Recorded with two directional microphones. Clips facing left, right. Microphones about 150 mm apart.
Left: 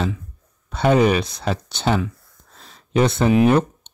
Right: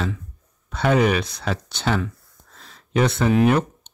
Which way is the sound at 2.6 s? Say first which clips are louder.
Left 2 dB; 25° left (ahead or behind).